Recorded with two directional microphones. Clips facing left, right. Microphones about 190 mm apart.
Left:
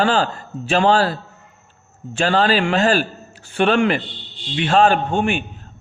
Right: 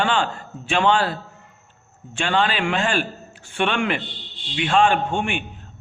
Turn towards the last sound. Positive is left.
turn(degrees=40)  # may be behind; listen again after turning